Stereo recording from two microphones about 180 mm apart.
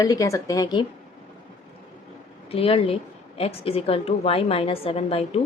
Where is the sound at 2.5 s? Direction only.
30° left (ahead or behind).